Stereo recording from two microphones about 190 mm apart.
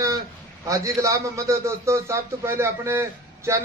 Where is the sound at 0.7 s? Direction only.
15° right (ahead or behind).